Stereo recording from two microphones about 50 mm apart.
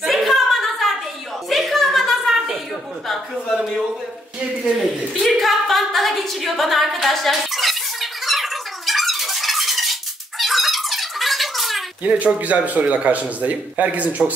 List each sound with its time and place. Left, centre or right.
0.0 s a sound: centre
5.2 s a capella: centre
10.4 s squeak: centre
12.1 s a man's voice: right